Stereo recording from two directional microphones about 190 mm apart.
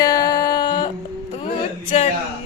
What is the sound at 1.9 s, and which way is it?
Speech, 35° left (ahead or behind).